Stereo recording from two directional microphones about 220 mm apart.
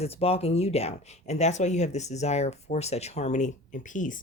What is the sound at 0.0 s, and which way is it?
Speech, 25° left (ahead or behind).